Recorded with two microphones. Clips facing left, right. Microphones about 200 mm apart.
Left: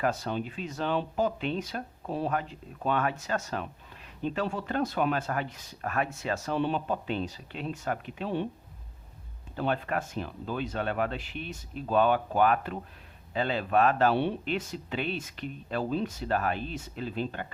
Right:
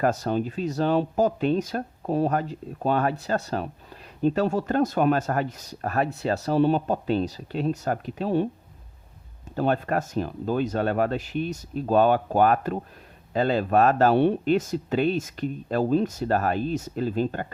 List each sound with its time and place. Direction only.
0.0 s speech: 45° right (ahead or behind)
9.6 s speech: 45° right (ahead or behind)